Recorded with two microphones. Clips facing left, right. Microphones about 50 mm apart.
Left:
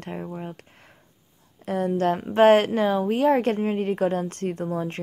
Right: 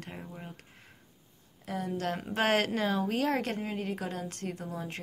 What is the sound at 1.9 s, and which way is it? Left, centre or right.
A woman's voice, left.